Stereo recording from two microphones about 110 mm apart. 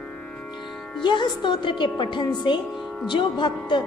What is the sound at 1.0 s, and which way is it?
Speech, 45° left (ahead or behind).